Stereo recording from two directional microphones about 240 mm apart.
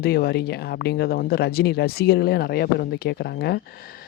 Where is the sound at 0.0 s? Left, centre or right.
Left.